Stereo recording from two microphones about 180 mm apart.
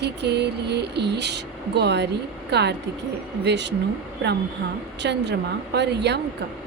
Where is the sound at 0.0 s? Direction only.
70° right (ahead or behind).